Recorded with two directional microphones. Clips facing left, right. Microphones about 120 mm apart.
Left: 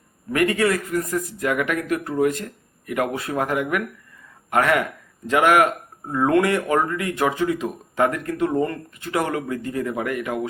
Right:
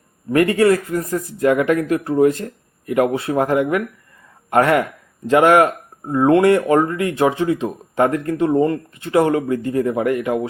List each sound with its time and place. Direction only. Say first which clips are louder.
0.3 s speech: right 6 dB; 30° right (ahead or behind)